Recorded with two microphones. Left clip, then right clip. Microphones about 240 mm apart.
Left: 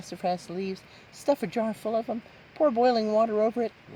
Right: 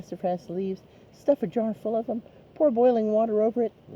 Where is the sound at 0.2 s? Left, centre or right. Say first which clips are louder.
Right 1 dB; left.